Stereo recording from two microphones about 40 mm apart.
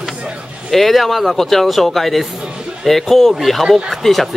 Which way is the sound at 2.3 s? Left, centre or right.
Centre.